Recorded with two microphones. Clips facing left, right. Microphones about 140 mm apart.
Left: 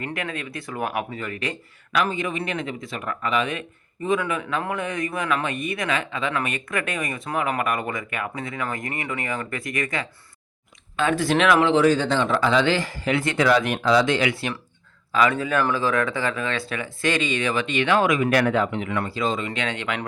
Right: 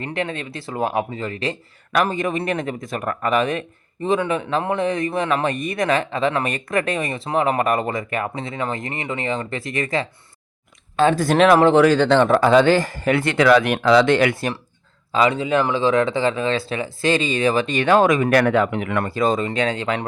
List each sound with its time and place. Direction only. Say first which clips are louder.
0.0 s speech: right 4 dB; 30° right (ahead or behind)
1.9 s speech: right 4 dB; 45° right (ahead or behind)
4.0 s speech: right 3 dB; 30° right (ahead or behind)
11.7 s speech: right 5 dB; 70° right (ahead or behind); by 14.5 s 50° right (ahead or behind)
15.1 s speech: right 3 dB; 25° right (ahead or behind)